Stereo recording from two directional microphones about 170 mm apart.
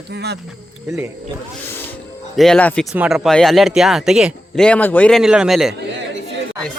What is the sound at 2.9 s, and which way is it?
Speech, 10° right (ahead or behind).